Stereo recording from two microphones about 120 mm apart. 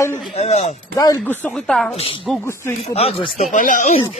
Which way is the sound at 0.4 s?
65° left (ahead or behind).